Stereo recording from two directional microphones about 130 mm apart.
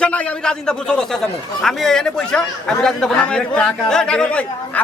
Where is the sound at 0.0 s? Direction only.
5° left (ahead or behind).